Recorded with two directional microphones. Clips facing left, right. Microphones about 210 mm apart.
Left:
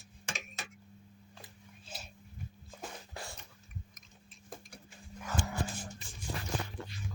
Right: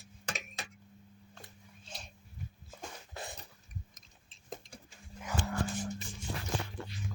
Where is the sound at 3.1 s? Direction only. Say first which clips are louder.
Right 2 dB; 20° right (ahead or behind).